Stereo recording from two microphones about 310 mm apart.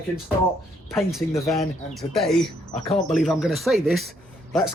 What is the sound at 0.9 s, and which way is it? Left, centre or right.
Speech, centre.